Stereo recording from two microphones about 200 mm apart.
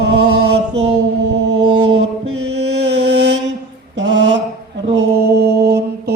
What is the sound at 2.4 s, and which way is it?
Music, 60° right (ahead or behind).